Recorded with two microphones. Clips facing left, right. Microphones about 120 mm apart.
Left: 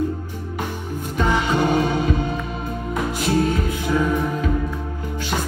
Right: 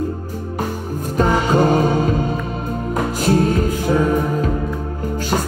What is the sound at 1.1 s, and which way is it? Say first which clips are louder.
Music: right 4 dB; 40° right (ahead or behind).